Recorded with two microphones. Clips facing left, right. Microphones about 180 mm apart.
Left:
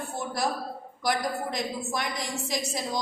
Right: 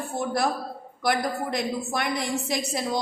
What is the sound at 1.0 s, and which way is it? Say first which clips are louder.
A woman's voice: right 3 dB; 60° right (ahead or behind).